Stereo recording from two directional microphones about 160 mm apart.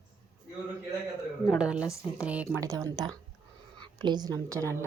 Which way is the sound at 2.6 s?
20° right (ahead or behind).